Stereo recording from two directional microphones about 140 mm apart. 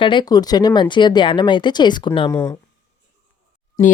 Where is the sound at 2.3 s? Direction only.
15° left (ahead or behind).